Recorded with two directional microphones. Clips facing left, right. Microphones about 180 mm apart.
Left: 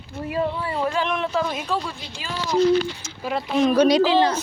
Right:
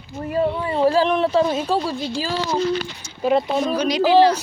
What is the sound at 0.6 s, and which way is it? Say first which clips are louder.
Speech: right 7 dB; 25° right (ahead or behind).